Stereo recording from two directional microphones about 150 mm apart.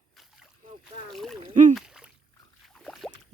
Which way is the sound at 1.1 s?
Centre (ahead or behind).